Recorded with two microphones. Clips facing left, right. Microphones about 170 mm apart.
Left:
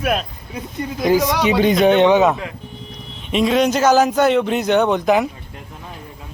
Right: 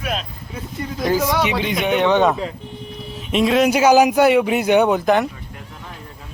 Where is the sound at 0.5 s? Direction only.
15° left (ahead or behind).